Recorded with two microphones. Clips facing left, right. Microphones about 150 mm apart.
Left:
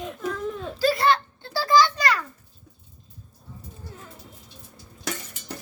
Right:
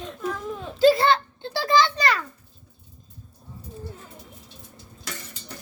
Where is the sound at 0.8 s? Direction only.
25° right (ahead or behind).